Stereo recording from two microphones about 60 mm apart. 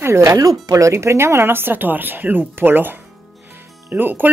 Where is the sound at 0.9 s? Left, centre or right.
Right.